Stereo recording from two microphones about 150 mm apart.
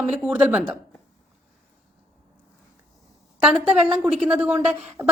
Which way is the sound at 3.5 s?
5° right (ahead or behind).